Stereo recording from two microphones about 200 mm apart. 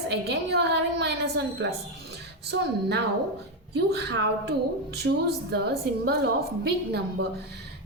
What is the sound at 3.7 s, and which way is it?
Speech, 55° right (ahead or behind).